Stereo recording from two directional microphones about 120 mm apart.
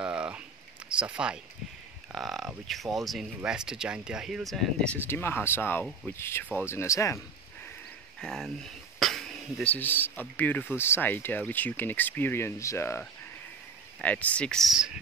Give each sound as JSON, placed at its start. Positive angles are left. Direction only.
{"t": 0.0, "sound": "a sound", "side_deg": -10}
{"t": 0.8, "sound": "speech", "side_deg": -10}
{"t": 4.9, "sound": "speech", "side_deg": 20}
{"t": 8.2, "sound": "speech", "side_deg": 5}
{"t": 14.0, "sound": "speech", "side_deg": 10}